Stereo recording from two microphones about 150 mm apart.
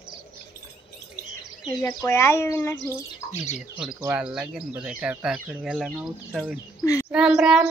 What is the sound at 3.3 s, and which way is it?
Speech, 50° left (ahead or behind).